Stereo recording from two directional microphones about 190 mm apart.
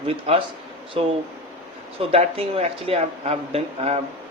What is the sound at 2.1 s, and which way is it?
Speech, 30° right (ahead or behind).